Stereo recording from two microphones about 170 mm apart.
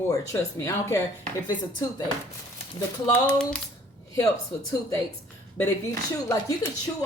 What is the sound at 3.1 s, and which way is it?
Speech, 5° left (ahead or behind).